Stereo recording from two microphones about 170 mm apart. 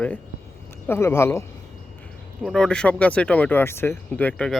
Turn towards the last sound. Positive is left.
turn(degrees=5)  # may be behind; listen again after turning